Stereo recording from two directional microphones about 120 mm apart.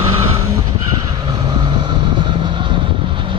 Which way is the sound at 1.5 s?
40° right (ahead or behind).